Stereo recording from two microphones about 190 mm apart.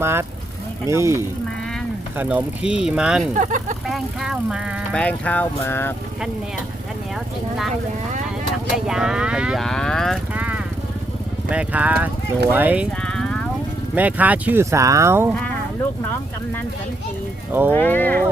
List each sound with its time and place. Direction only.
0.0 s speech: 15° right (ahead or behind)
3.3 s speech: 40° right (ahead or behind)
3.8 s speech: centre (ahead or behind)
8.9 s speech: 5° right (ahead or behind)
10.3 s vehicle: 5° right (ahead or behind)
11.4 s speech: 5° right (ahead or behind)
13.1 s vehicle: 5° left (ahead or behind)
13.9 s speech: 10° right (ahead or behind)
17.7 s speech: 10° left (ahead or behind)